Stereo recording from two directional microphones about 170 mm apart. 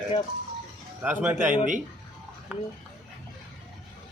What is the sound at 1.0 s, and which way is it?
Speech, 10° right (ahead or behind).